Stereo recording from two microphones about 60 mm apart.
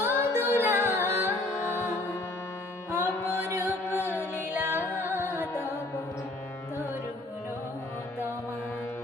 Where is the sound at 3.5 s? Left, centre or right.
Right.